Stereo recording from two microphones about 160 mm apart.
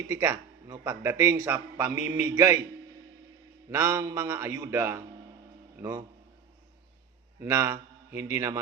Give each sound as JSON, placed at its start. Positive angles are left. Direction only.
{"t": 0.1, "sound": "a man's voice", "side_deg": -15}
{"t": 3.7, "sound": "a man's voice", "side_deg": -15}
{"t": 7.4, "sound": "a man's voice", "side_deg": -15}